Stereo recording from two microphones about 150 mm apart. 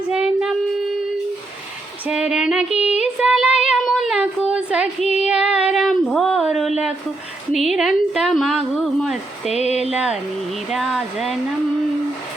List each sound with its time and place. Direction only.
0.1 s child singing: 5° right (ahead or behind)
2.0 s a woman's voice: 5° right (ahead or behind)
2.7 s child singing: 5° right (ahead or behind)
7.5 s a woman's voice: centre (ahead or behind)
9.5 s a sound: 45° left (ahead or behind)
9.9 s a woman's voice: 5° right (ahead or behind)